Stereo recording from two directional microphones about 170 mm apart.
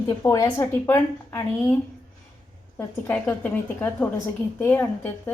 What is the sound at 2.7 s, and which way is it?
A woman's voice, 10° left (ahead or behind).